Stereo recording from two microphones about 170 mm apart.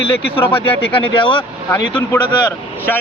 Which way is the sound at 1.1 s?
30° left (ahead or behind).